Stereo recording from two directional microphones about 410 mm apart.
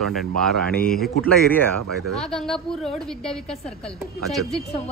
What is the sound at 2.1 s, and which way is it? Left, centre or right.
A woman's voice, centre.